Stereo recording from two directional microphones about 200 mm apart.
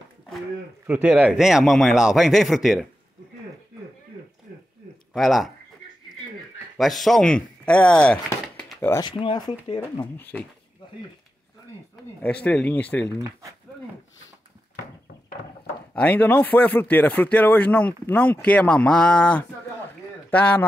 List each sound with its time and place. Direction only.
0.8 s speech: 5° right (ahead or behind)
5.1 s speech: centre (ahead or behind)
6.8 s speech: centre (ahead or behind); by 9.8 s 20° left (ahead or behind)
10.3 s speech: 5° left (ahead or behind)
12.2 s speech: 10° left (ahead or behind)
13.2 s speech: 15° right (ahead or behind)
15.9 s speech: 5° left (ahead or behind)